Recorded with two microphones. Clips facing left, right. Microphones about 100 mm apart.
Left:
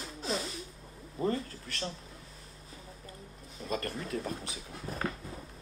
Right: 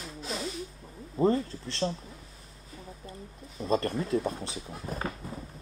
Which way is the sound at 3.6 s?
30° right (ahead or behind).